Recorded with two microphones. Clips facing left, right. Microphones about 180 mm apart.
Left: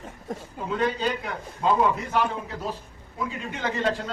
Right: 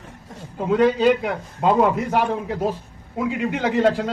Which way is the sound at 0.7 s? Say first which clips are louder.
Right 10 dB; 75° right (ahead or behind).